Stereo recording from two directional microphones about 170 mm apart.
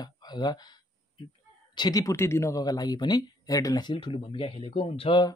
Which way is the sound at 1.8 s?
20° left (ahead or behind).